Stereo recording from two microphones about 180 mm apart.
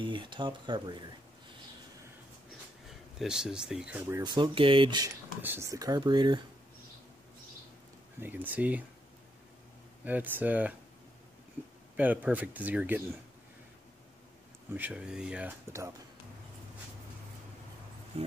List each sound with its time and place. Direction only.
0.0 s speech: 25° right (ahead or behind)
2.9 s speech: 5° right (ahead or behind)
4.2 s speech: 25° right (ahead or behind)
5.4 s speech: 15° right (ahead or behind)
8.2 s speech: 10° right (ahead or behind)
10.0 s speech: 10° right (ahead or behind)
11.6 s a sound: 10° right (ahead or behind)
12.0 s speech: 10° right (ahead or behind)
14.7 s speech: 10° right (ahead or behind)